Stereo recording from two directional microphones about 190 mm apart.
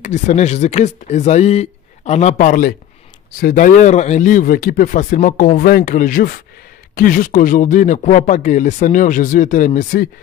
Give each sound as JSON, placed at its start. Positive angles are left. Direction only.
{"t": 0.0, "sound": "speech", "side_deg": 40}